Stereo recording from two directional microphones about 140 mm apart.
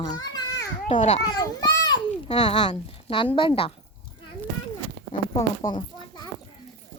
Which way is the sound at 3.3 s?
40° left (ahead or behind).